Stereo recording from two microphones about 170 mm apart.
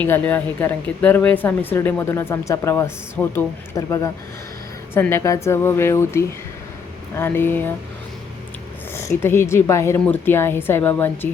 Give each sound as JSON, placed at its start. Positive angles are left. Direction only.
{"t": 0.0, "sound": "a woman's voice", "side_deg": 10}
{"t": 9.2, "sound": "a woman's voice", "side_deg": 15}